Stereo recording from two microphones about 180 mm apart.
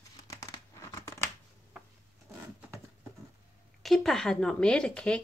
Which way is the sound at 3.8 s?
Centre (ahead or behind).